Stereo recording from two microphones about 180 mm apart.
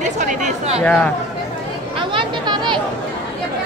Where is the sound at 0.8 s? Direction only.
10° left (ahead or behind).